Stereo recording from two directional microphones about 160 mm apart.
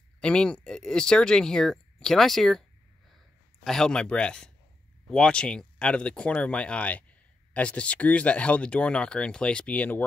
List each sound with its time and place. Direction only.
0.2 s speech: 5° left (ahead or behind)
3.6 s speech: 5° left (ahead or behind)